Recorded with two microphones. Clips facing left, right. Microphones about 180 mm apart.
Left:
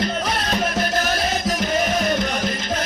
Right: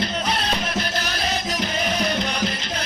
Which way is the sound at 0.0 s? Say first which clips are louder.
Left 2 dB; 50° left (ahead or behind).